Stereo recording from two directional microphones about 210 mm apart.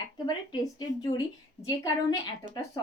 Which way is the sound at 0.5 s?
20° left (ahead or behind).